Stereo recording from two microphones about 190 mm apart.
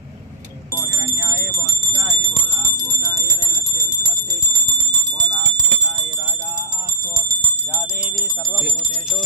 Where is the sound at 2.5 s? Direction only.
15° right (ahead or behind).